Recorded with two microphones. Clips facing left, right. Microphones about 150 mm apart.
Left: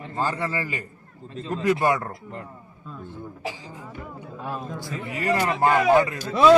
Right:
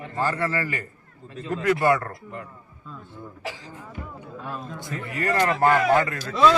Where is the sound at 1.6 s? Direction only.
15° left (ahead or behind).